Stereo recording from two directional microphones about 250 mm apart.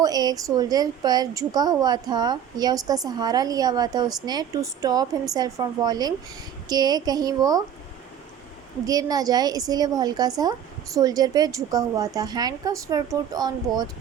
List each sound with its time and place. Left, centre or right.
0.0 s a woman's voice: centre
8.9 s a woman's voice: centre